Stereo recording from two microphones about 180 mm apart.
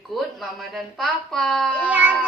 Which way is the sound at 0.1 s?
Centre (ahead or behind).